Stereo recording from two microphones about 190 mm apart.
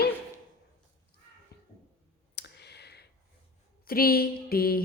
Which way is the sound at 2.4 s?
60° left (ahead or behind).